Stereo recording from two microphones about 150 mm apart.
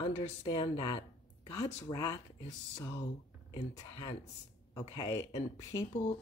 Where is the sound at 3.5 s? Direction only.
25° left (ahead or behind).